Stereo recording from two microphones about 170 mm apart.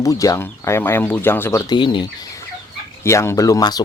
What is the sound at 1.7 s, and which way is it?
Speech, 25° left (ahead or behind).